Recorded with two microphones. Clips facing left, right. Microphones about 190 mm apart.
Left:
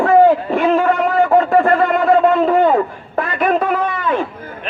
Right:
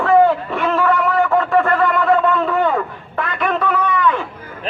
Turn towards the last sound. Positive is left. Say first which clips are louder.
# even
turn(degrees=40)  # may be behind; listen again after turning